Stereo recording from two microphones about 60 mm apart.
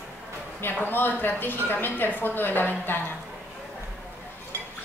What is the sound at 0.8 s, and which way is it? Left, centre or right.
A woman's voice, left.